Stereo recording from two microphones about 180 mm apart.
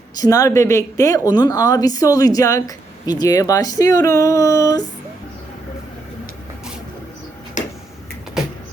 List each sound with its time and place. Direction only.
0.2 s speech: 20° left (ahead or behind)
7.6 s tick-tock: 45° left (ahead or behind)